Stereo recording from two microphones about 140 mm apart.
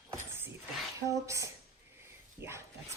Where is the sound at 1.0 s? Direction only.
20° right (ahead or behind).